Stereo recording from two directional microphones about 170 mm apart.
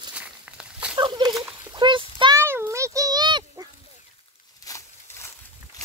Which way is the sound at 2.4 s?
15° right (ahead or behind).